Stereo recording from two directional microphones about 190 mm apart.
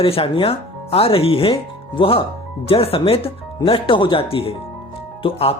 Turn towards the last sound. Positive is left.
turn(degrees=30)  # may be behind; listen again after turning